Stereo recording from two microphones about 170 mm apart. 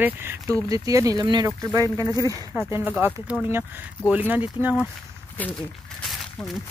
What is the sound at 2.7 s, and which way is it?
Speech, 10° right (ahead or behind).